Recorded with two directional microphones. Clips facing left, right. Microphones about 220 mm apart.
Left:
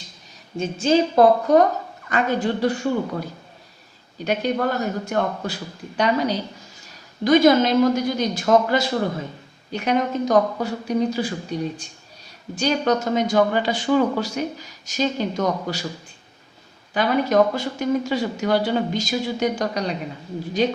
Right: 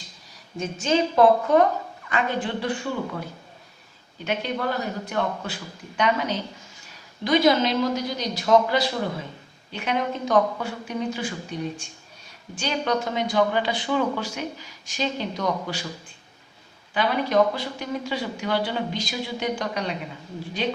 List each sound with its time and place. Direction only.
0.5 s a woman's voice: 30° left (ahead or behind)
4.2 s a woman's voice: 40° left (ahead or behind)
7.3 s a woman's voice: 50° left (ahead or behind)
12.5 s speech: 45° left (ahead or behind)
16.9 s a woman's voice: 45° left (ahead or behind)